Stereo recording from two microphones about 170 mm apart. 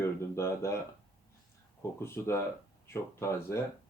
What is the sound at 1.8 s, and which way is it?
Speech, 15° left (ahead or behind).